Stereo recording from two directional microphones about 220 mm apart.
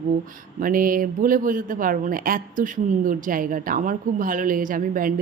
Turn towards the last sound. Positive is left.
turn(degrees=-40)  # may be behind; listen again after turning